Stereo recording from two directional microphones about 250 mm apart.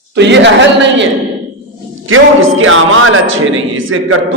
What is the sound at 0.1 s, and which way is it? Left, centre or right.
Speech, right.